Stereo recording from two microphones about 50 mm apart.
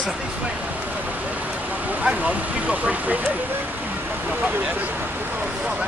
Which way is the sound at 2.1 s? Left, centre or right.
Right.